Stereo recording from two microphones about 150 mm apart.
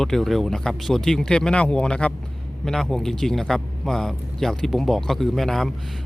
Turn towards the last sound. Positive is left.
turn(degrees=0)  # may be behind; listen again after turning